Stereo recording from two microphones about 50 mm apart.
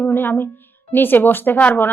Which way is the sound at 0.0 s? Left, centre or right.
Left.